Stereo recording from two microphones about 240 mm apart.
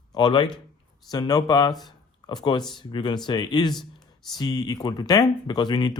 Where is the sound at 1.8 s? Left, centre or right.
Centre.